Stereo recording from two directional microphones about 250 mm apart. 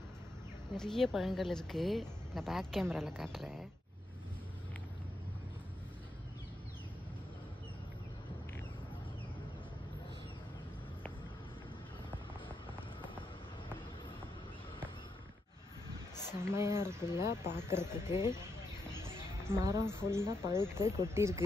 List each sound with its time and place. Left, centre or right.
0.7 s a woman's voice: centre
16.3 s a sound: centre
16.8 s speech: centre
17.6 s speech: centre
18.1 s speech: centre
19.4 s speech: centre